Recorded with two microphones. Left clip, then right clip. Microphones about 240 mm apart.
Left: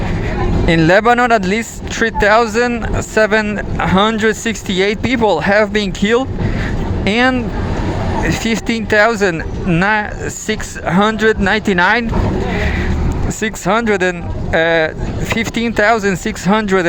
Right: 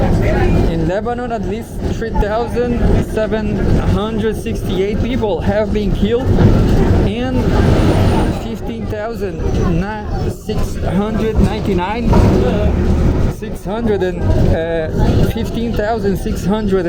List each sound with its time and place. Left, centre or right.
0.7 s speech: left
8.4 s speech: left
10.9 s speech: left
13.7 s speech: left